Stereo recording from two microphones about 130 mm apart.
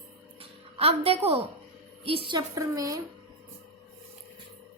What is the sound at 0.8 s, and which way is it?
Speech, 50° right (ahead or behind).